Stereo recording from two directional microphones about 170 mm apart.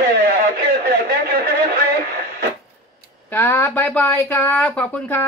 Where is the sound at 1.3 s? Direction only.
65° right (ahead or behind).